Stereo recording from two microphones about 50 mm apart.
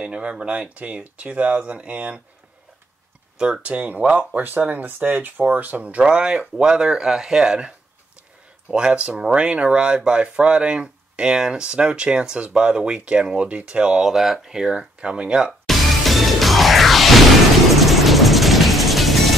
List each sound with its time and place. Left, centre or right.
0.0 s speech: right
3.6 s speech: right
6.0 s speech: centre
14.8 s speech: right
15.6 s music: centre